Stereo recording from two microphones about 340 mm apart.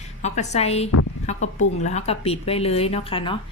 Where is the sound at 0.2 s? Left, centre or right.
Centre.